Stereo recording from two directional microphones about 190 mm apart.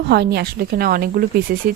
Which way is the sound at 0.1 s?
60° right (ahead or behind).